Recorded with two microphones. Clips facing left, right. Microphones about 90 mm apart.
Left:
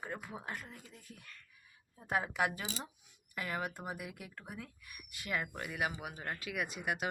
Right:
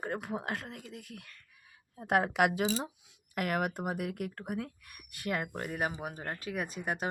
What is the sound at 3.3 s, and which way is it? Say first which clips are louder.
Speech: right 7 dB; 70° right (ahead or behind).